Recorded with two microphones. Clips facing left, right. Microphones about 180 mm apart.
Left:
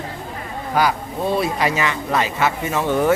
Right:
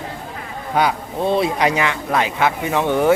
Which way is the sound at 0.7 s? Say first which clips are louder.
Right 1 dB; 20° right (ahead or behind).